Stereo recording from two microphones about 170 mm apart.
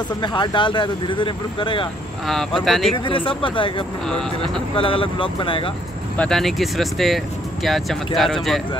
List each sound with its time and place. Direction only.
0.2 s speech: 25° left (ahead or behind)
2.6 s speech: centre (ahead or behind)
3.1 s speech: 30° left (ahead or behind)
6.1 s speech: 5° left (ahead or behind)